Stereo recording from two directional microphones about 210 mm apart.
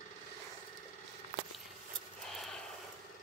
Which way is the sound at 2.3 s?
Centre (ahead or behind).